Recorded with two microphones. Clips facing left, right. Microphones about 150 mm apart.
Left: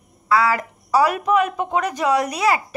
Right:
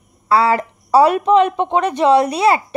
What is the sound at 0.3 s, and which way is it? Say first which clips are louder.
A woman's voice: right 4 dB; 30° right (ahead or behind).